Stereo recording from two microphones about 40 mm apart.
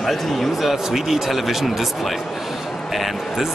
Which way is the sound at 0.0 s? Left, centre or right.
Centre.